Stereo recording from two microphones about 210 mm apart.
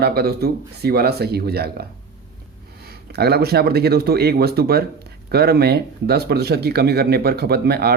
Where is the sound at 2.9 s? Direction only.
50° right (ahead or behind).